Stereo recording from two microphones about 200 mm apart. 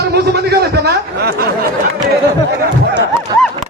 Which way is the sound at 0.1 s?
50° right (ahead or behind).